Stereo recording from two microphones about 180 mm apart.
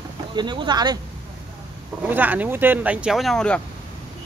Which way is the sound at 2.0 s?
10° right (ahead or behind).